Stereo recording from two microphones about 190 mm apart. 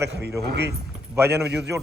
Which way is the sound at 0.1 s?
65° right (ahead or behind).